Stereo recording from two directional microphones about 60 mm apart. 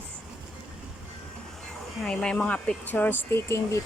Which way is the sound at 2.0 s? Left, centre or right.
Centre.